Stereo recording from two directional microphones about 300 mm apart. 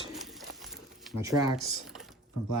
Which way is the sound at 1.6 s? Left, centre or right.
Centre.